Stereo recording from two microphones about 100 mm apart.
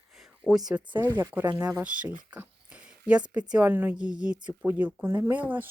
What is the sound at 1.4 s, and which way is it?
Speech, 20° right (ahead or behind).